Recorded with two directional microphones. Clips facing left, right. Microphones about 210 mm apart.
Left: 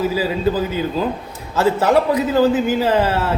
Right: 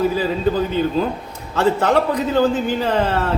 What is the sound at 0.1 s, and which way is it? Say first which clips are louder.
A man's voice: even; 5° left (ahead or behind).